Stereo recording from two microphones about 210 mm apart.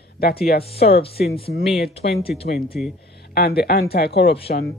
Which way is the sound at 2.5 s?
45° left (ahead or behind).